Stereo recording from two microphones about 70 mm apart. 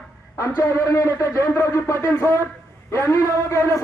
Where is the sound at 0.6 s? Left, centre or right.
Left.